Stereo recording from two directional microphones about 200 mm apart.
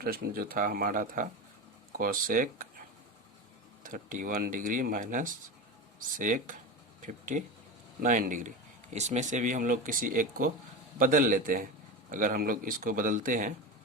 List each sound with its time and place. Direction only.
0.0 s speech: 50° right (ahead or behind)
3.8 s speech: 40° right (ahead or behind)